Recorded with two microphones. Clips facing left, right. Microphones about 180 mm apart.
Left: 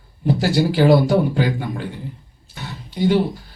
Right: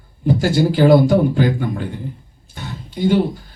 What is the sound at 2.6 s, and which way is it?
Guitar, 50° right (ahead or behind).